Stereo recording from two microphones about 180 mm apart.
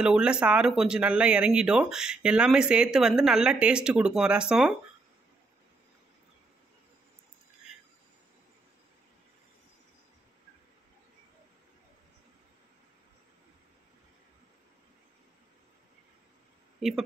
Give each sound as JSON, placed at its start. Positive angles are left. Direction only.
{"t": 0.0, "sound": "speech", "side_deg": -5}
{"t": 16.8, "sound": "speech", "side_deg": -5}